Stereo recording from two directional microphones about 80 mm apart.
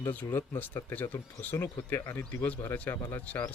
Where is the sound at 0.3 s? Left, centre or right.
Left.